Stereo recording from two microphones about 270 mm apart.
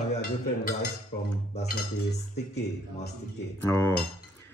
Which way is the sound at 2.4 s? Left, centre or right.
Left.